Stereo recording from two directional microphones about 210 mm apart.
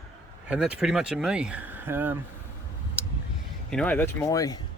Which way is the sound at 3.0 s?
5° right (ahead or behind).